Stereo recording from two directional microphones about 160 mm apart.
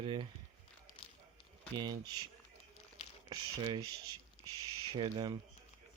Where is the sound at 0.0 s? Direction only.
30° right (ahead or behind).